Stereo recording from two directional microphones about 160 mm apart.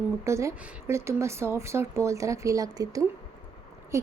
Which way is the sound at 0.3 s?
15° right (ahead or behind).